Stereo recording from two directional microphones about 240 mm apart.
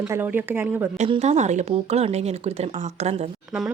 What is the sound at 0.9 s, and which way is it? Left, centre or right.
Speech, right.